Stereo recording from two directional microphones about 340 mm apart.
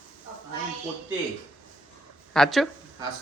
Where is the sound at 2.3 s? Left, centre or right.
Centre.